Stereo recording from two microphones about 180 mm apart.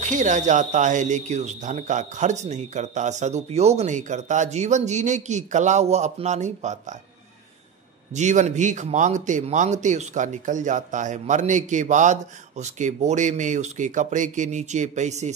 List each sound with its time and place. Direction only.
0.1 s speech: 45° right (ahead or behind)
8.1 s a man's voice: 40° right (ahead or behind)